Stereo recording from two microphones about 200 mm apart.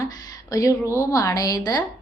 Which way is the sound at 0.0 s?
20° left (ahead or behind).